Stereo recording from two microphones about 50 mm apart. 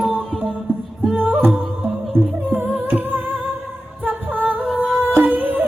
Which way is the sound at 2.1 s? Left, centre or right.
Right.